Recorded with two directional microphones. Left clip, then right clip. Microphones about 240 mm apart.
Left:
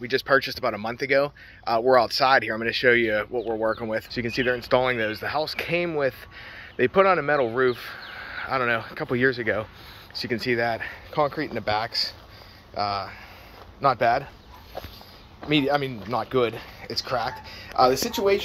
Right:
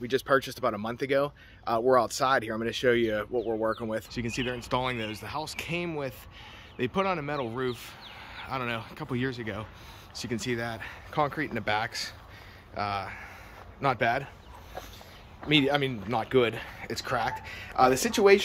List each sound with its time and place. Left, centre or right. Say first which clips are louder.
0.0 s speech: left 4 dB; centre
15.4 s speech: left 2 dB; centre